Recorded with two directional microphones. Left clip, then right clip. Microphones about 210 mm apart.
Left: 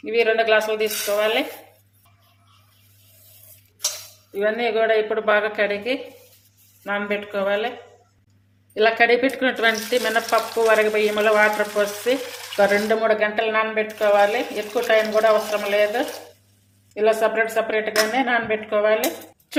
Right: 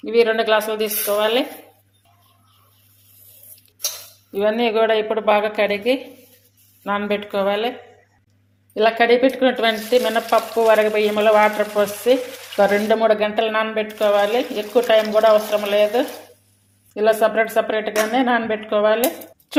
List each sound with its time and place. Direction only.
0.0 s a woman's voice: 25° right (ahead or behind)
4.3 s a woman's voice: 25° right (ahead or behind)
8.7 s a woman's voice: 15° right (ahead or behind)
16.9 s a woman's voice: 20° right (ahead or behind)